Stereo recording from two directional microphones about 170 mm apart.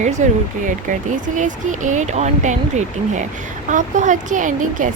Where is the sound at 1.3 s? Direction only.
45° right (ahead or behind).